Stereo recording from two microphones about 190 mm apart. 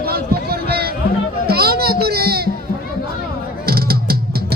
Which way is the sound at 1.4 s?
55° right (ahead or behind).